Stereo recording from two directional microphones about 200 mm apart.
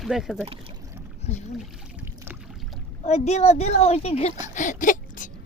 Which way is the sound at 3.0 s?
35° left (ahead or behind).